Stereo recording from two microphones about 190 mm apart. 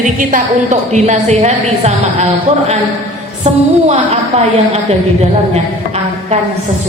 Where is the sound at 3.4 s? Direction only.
35° right (ahead or behind).